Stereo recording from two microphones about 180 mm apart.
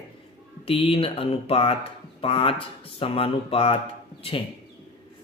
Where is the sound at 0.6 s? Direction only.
30° left (ahead or behind).